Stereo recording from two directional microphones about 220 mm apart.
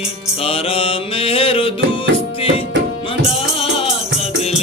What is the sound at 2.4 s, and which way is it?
Tabla, 25° left (ahead or behind).